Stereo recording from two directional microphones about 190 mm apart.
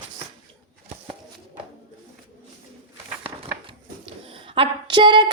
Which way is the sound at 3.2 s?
30° right (ahead or behind).